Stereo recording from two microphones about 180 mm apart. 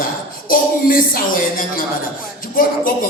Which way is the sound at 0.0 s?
50° left (ahead or behind).